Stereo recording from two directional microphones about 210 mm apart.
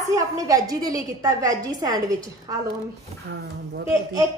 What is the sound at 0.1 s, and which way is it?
A woman's voice, 15° right (ahead or behind).